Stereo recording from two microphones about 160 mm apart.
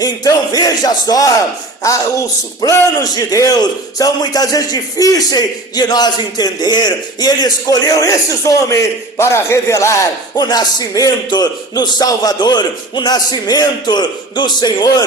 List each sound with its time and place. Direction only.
0.0 s a man's voice: 25° left (ahead or behind)